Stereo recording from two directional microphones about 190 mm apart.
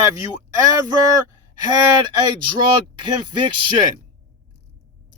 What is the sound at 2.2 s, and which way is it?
Speech, 25° right (ahead or behind).